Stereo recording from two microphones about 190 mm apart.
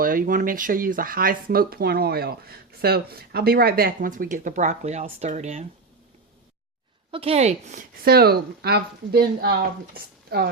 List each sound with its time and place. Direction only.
0.0 s speech: 45° right (ahead or behind)
7.1 s speech: 30° right (ahead or behind)
8.0 s speech: 55° right (ahead or behind)